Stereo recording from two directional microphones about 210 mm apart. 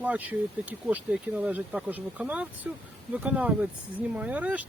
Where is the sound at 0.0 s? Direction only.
5° right (ahead or behind).